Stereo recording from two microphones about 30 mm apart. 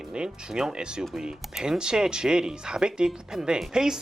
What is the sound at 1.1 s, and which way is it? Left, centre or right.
Speech, centre.